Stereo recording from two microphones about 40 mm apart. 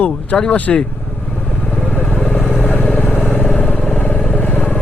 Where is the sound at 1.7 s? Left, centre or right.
Left.